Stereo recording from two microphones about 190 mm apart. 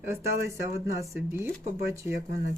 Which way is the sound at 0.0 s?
15° right (ahead or behind).